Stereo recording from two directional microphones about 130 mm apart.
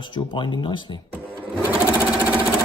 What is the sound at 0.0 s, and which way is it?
Speech, 35° left (ahead or behind).